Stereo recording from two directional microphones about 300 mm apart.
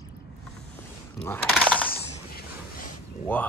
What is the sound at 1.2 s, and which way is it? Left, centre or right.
Speech, centre.